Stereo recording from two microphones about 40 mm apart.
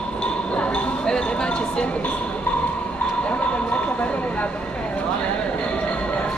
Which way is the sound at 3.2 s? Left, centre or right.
Left.